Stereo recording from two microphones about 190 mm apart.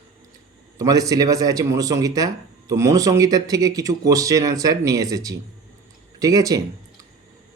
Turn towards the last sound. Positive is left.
turn(degrees=-20)  # may be behind; listen again after turning